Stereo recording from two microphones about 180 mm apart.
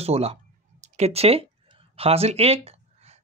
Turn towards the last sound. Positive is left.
turn(degrees=-35)  # may be behind; listen again after turning